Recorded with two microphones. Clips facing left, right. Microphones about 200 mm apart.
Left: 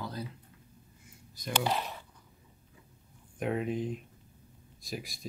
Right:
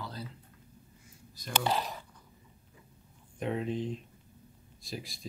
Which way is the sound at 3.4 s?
5° left (ahead or behind).